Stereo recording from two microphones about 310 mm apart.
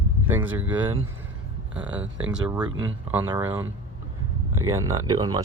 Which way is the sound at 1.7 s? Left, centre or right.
Centre.